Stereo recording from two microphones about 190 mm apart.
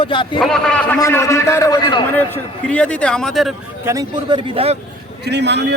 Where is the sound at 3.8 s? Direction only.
15° right (ahead or behind).